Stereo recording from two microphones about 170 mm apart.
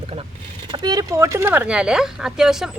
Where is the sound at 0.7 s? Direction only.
25° right (ahead or behind); by 2.7 s 5° right (ahead or behind).